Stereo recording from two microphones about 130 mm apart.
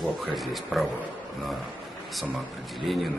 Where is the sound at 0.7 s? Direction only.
Centre (ahead or behind).